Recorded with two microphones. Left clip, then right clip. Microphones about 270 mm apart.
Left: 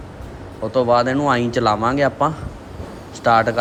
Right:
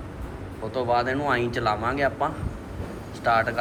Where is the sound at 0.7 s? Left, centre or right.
Left.